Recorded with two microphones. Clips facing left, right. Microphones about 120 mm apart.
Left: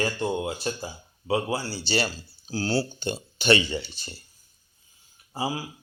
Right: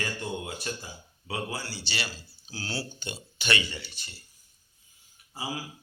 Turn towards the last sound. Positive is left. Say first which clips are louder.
# left 6 dB
turn(degrees=30)  # may be behind; listen again after turning